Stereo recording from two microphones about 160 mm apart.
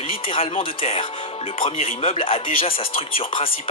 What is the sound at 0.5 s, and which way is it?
Speech, 40° left (ahead or behind).